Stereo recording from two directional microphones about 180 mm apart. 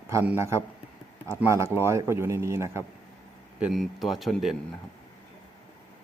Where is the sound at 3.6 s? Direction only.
Centre (ahead or behind).